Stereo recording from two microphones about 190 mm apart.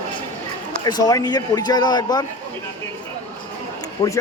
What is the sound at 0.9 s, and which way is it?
Speech, 20° left (ahead or behind).